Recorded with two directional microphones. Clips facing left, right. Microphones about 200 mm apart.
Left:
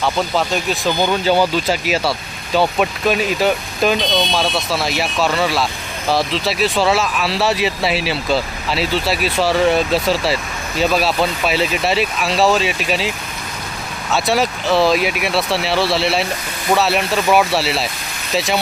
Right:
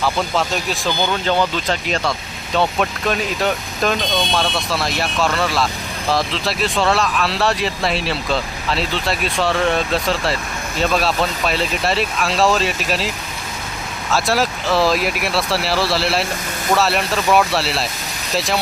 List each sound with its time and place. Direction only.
0.0 s speech: centre (ahead or behind)